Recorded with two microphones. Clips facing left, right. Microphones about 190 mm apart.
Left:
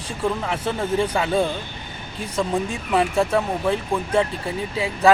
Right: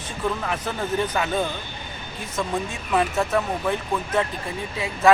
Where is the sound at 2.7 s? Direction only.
30° left (ahead or behind).